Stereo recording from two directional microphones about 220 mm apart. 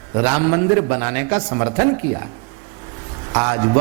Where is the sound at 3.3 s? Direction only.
20° right (ahead or behind).